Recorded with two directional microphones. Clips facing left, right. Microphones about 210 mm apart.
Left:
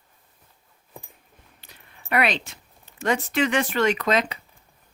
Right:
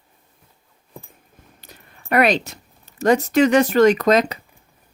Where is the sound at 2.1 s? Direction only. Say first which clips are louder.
Right 6 dB; 40° right (ahead or behind).